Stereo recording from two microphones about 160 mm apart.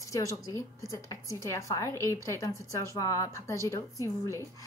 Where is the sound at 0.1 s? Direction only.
20° left (ahead or behind).